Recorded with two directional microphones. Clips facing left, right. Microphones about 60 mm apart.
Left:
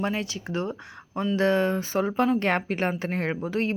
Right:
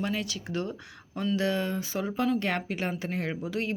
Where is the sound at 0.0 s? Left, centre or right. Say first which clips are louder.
Left 3 dB; left.